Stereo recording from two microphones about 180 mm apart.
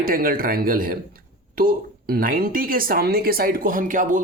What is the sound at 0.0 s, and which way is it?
Speech, 50° right (ahead or behind).